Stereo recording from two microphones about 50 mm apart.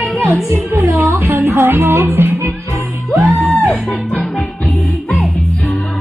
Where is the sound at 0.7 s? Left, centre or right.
Right.